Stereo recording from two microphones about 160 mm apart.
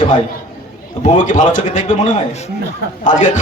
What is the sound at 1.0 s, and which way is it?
A man's voice, 50° left (ahead or behind).